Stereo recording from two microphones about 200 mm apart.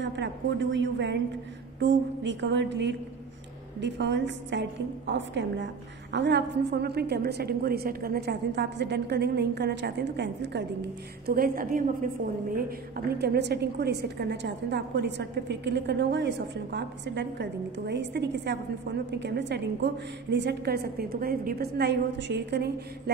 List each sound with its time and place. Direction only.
0.0 s a woman's voice: 65° right (ahead or behind)